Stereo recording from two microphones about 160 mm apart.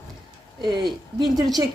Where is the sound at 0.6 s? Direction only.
30° right (ahead or behind).